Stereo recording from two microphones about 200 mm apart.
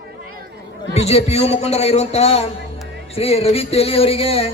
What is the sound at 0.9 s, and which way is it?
A man's voice, 30° left (ahead or behind).